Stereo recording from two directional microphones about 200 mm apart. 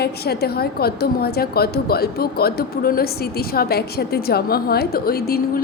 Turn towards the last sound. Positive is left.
turn(degrees=50)  # may be behind; listen again after turning